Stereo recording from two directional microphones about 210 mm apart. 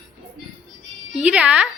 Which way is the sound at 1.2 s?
5° right (ahead or behind).